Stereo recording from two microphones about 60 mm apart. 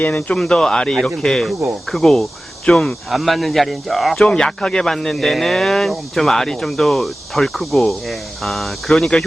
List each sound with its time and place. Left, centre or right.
0.0 s speech: left
0.3 s speech: centre